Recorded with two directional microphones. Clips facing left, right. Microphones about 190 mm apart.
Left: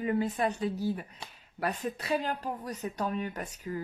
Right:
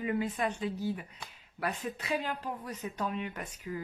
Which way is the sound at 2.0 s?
40° left (ahead or behind).